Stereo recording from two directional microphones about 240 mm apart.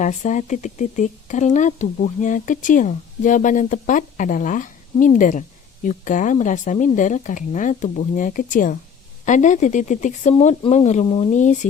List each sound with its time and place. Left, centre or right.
0.0 s speech: left